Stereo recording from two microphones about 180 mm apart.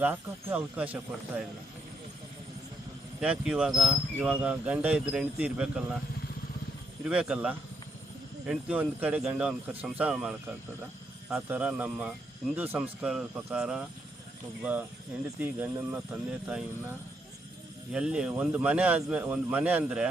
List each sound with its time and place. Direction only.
0.0 s speech: 10° right (ahead or behind)
3.2 s speech: 5° right (ahead or behind)
7.0 s speech: 5° right (ahead or behind)
17.9 s speech: 5° right (ahead or behind)